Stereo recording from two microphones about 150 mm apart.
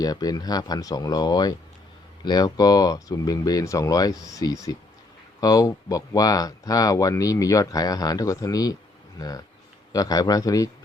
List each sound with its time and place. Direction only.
0.0 s speech: 25° left (ahead or behind)